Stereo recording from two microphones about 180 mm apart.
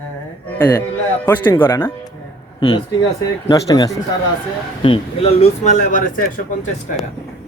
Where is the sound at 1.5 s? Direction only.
10° left (ahead or behind).